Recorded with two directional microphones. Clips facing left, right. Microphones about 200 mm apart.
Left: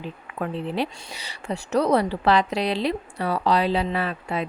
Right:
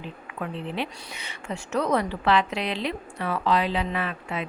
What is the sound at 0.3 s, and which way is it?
A woman's voice, 40° left (ahead or behind).